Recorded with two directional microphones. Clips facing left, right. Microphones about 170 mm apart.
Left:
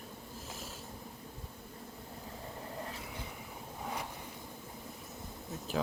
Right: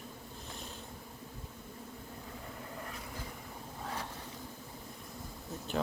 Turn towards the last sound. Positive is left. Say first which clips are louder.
# even
turn(degrees=0)  # may be behind; listen again after turning